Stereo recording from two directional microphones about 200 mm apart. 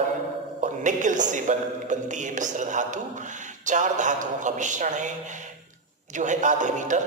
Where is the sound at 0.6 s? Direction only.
40° right (ahead or behind).